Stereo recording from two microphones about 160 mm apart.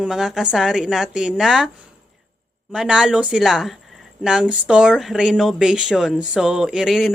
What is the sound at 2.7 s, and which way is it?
Speech, 5° right (ahead or behind).